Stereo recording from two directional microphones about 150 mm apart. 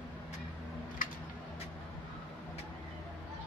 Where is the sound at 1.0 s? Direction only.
65° left (ahead or behind).